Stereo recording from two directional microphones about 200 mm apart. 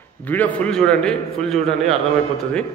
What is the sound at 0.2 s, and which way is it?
A man's voice, 10° left (ahead or behind).